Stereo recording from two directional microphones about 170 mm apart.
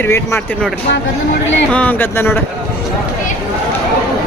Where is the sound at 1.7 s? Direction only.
10° left (ahead or behind).